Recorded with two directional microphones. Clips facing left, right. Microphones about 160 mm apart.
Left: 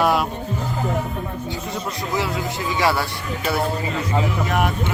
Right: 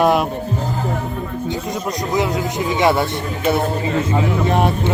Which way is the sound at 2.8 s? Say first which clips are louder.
Right 5 dB; 20° right (ahead or behind).